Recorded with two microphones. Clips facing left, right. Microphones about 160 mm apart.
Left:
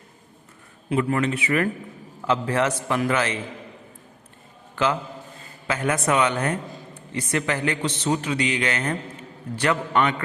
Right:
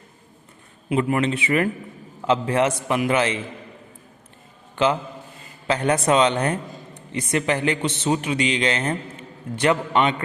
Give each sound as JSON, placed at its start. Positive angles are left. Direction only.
{"t": 1.0, "sound": "a man's voice", "side_deg": -20}
{"t": 4.7, "sound": "a man's voice", "side_deg": -25}